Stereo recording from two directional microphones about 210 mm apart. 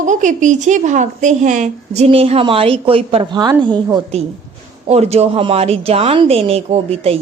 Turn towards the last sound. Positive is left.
turn(degrees=-30)  # may be behind; listen again after turning